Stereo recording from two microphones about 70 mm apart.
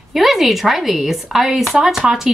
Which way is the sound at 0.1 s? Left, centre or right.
Centre.